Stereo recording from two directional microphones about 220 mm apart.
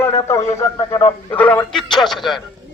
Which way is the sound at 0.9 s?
10° left (ahead or behind).